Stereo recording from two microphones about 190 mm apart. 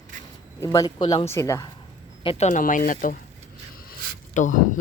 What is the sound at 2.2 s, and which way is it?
Speech, 30° left (ahead or behind).